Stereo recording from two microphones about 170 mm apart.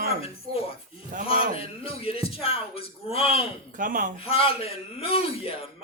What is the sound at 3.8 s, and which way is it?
Speech, 50° right (ahead or behind).